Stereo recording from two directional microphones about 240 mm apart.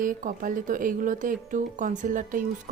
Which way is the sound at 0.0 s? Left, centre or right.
Right.